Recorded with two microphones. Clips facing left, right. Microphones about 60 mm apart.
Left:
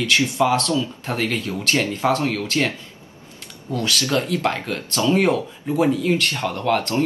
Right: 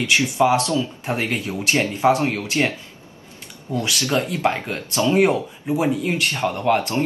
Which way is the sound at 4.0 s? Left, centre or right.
Right.